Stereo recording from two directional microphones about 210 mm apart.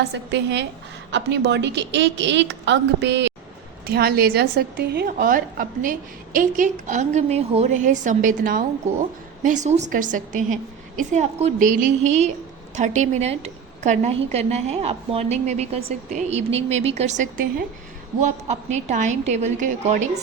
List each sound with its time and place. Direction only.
0.0 s a woman's voice: 55° right (ahead or behind)
3.8 s a woman's voice: 45° right (ahead or behind)